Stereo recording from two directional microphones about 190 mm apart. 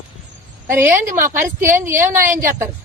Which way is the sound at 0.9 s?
45° right (ahead or behind).